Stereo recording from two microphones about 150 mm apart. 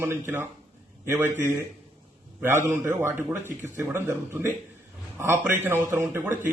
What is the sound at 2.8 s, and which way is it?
Speech, 15° right (ahead or behind).